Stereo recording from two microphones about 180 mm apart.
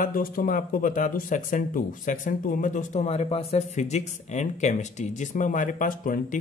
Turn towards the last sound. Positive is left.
turn(degrees=45)  # may be behind; listen again after turning